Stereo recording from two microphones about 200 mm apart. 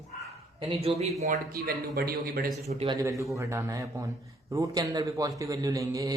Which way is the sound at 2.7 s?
30° right (ahead or behind).